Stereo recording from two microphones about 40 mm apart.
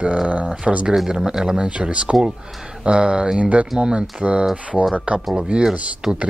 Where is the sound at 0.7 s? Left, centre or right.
Centre.